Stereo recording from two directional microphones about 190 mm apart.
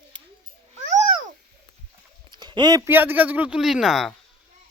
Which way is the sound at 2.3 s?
25° right (ahead or behind).